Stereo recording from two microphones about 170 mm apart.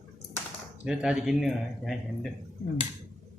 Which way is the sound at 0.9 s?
Centre (ahead or behind).